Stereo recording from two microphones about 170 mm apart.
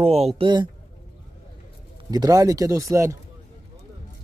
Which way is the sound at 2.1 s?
20° right (ahead or behind).